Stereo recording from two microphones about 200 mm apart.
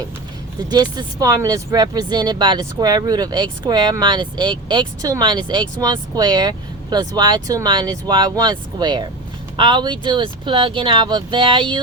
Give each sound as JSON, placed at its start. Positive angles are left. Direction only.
{"t": 0.7, "sound": "speech", "side_deg": -20}